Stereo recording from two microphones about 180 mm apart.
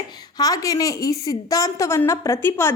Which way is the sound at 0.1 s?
20° left (ahead or behind).